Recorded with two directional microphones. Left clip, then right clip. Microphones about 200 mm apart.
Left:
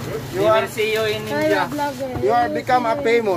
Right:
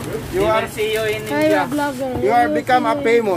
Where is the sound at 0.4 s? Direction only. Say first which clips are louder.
Left 1 dB; centre (ahead or behind).